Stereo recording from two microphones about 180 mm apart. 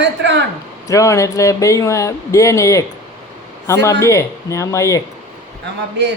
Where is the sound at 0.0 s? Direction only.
80° right.